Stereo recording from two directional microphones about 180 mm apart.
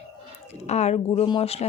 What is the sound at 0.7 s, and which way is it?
Speech, 40° left (ahead or behind).